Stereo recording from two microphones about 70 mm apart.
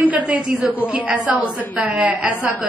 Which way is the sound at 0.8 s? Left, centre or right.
Centre.